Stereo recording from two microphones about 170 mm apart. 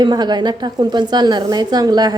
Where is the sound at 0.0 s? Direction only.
25° right (ahead or behind).